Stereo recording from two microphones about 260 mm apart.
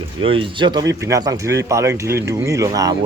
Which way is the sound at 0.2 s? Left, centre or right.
Centre.